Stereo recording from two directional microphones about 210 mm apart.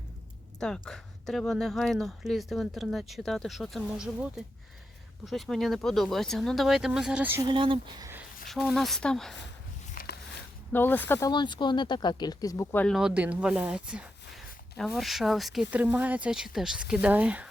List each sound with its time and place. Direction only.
0.6 s speech: 5° left (ahead or behind)
7.4 s speech: 25° right (ahead or behind)
8.6 s speech: centre (ahead or behind)
9.9 s a sound: 40° left (ahead or behind)
10.7 s speech: 10° left (ahead or behind)
11.3 s speech: 20° left (ahead or behind); by 17.5 s 5° right (ahead or behind)